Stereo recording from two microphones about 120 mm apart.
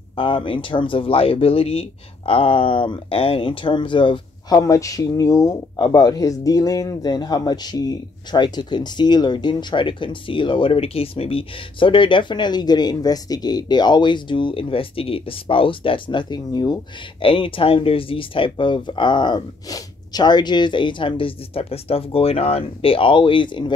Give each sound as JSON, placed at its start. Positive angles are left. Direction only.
{"t": 0.1, "sound": "speech", "side_deg": 45}